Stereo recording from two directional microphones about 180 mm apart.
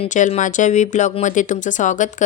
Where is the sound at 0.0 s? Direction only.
40° left (ahead or behind).